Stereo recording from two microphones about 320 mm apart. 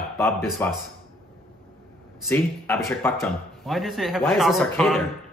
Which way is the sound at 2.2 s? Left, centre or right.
Centre.